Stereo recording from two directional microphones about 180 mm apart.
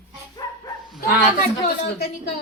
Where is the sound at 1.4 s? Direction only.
60° left (ahead or behind).